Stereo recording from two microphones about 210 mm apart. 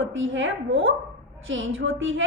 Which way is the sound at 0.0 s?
65° right (ahead or behind).